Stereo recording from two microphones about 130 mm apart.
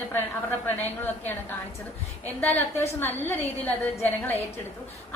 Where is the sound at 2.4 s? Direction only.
15° left (ahead or behind).